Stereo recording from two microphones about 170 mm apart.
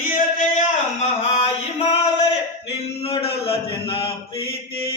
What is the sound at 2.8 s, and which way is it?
Mantra, 35° left (ahead or behind).